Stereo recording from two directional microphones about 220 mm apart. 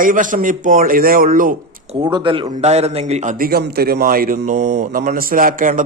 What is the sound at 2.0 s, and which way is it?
A man's voice, 20° right (ahead or behind).